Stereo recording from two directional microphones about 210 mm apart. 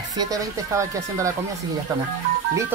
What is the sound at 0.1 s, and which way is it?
Speech, 15° right (ahead or behind).